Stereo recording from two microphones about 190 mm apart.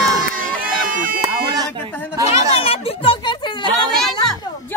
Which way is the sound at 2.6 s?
30° left (ahead or behind).